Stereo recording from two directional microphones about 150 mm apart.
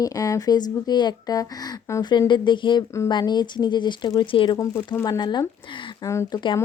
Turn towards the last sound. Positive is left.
turn(degrees=20)  # may be behind; listen again after turning